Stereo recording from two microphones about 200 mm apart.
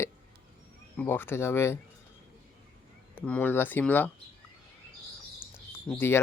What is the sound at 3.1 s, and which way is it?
Speech, 5° left (ahead or behind).